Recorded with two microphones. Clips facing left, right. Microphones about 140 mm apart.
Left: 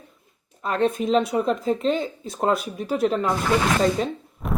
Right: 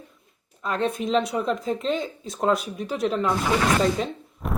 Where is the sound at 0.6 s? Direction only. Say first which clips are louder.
Left 3 dB; centre (ahead or behind).